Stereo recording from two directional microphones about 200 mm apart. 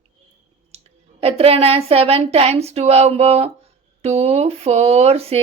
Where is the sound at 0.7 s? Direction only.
30° right (ahead or behind).